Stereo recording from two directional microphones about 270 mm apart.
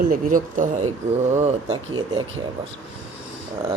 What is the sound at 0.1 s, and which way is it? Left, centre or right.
Speech, right.